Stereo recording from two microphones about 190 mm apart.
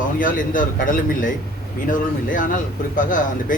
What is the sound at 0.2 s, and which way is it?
Speech, 45° left (ahead or behind).